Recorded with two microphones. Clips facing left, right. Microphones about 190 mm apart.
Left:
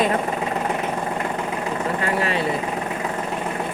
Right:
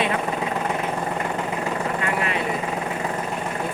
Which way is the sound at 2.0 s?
30° left (ahead or behind).